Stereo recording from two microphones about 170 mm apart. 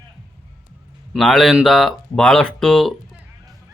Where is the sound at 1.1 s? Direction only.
Centre (ahead or behind).